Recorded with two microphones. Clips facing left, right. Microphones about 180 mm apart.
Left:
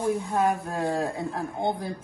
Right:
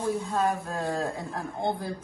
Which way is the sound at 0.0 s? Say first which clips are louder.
Left 2 dB; 15° left (ahead or behind).